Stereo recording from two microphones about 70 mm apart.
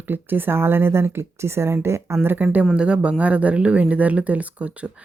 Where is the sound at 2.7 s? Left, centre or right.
Centre.